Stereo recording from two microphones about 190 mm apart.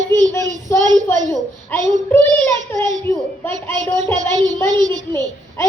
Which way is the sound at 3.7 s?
20° right (ahead or behind).